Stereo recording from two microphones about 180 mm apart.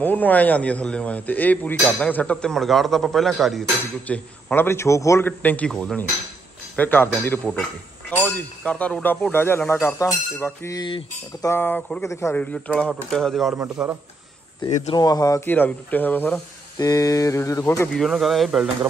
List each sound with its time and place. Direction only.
0.0 s speech: 10° left (ahead or behind); by 11.1 s 25° left (ahead or behind)
11.4 s speech: 10° left (ahead or behind); by 13.9 s 5° right (ahead or behind)
15.0 s speech: 20° left (ahead or behind)
17.9 s speech: centre (ahead or behind)